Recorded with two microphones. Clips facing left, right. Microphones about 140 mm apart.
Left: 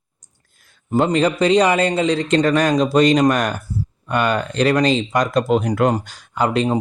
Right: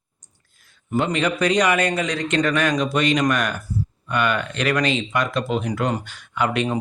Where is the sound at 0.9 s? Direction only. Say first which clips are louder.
Left 5 dB; 35° left (ahead or behind).